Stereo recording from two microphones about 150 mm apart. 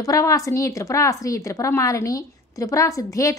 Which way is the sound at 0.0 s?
25° left (ahead or behind).